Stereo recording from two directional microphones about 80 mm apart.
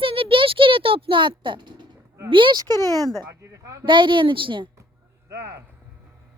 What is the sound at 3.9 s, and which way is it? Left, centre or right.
Speech, right.